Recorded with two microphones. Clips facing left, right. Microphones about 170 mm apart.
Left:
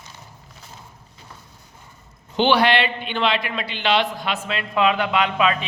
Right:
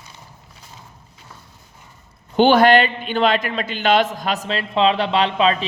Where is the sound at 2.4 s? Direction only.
45° right (ahead or behind).